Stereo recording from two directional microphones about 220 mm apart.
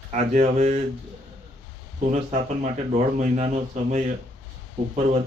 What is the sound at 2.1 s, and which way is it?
Speech, 30° right (ahead or behind).